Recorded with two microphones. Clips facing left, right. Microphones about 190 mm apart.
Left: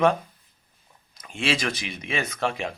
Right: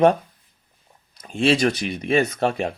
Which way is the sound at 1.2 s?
35° right (ahead or behind).